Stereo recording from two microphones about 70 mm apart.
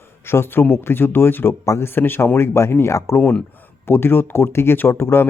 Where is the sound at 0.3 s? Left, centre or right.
Left.